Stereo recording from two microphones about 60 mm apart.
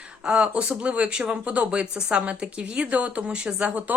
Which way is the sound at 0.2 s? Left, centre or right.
Centre.